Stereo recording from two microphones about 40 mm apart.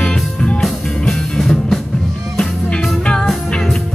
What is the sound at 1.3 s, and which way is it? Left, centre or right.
Music, centre.